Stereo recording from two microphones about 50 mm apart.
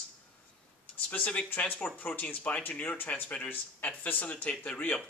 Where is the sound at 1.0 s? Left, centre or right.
Left.